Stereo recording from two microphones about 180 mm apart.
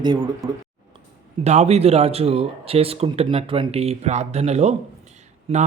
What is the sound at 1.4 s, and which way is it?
Speech, 35° right (ahead or behind).